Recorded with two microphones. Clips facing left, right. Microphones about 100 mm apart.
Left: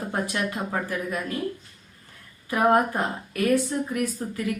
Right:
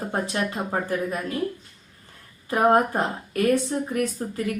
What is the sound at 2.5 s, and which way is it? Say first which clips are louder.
A woman's voice: right 1 dB; 30° right (ahead or behind).